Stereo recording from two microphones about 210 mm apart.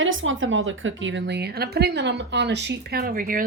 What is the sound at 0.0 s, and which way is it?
A woman's voice, 65° right (ahead or behind).